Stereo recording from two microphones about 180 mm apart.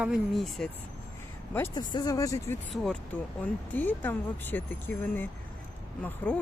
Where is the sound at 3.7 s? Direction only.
10° left (ahead or behind).